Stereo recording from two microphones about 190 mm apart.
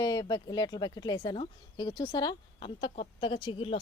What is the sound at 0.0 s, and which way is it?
Speech, 20° left (ahead or behind).